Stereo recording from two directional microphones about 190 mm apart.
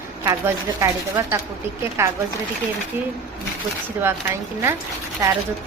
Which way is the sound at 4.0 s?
15° right (ahead or behind).